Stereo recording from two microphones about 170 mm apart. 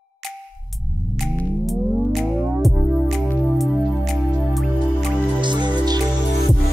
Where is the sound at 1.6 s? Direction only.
Centre (ahead or behind).